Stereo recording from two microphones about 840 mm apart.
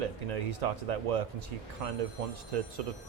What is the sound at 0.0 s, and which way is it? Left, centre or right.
Speech, right.